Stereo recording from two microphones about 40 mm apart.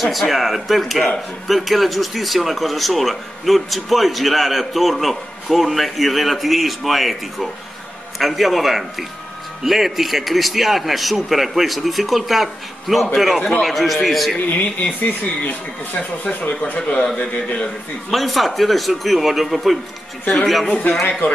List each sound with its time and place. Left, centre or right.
0.0 s speech: centre
14.6 s speech: left
16.9 s a man's voice: centre
18.1 s speech: centre